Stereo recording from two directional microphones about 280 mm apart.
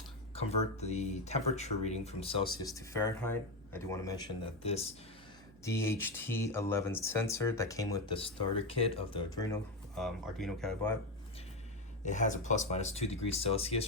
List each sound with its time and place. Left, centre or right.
0.3 s speech: left
5.6 s speech: centre
9.9 s speech: centre
12.0 s speech: left